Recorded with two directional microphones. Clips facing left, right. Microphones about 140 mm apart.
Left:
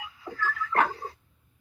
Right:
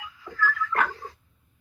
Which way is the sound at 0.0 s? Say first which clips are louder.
Right 4 dB; 30° left (ahead or behind).